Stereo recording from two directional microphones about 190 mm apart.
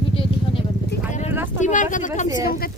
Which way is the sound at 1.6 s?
40° left (ahead or behind).